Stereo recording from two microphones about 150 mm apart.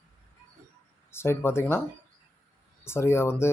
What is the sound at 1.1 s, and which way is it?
Speech, 15° left (ahead or behind).